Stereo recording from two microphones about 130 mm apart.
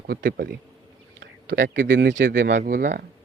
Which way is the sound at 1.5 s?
90° right.